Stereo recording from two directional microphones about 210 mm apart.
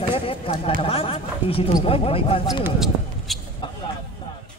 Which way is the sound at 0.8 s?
25° left (ahead or behind).